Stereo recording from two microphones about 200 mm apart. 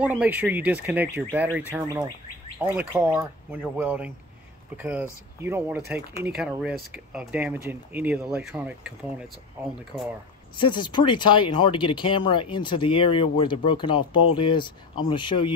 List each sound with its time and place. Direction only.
0.0 s speech: 5° right (ahead or behind)
10.5 s speech: 25° left (ahead or behind)